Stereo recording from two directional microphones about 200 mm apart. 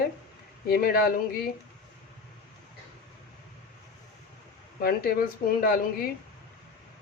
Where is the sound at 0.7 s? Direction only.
50° left (ahead or behind).